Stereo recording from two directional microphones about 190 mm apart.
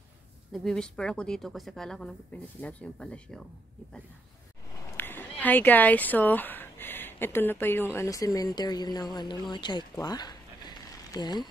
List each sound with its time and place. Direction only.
0.5 s speech: 5° left (ahead or behind)
4.9 s speech: 10° left (ahead or behind)
9.9 s a sound: 20° left (ahead or behind)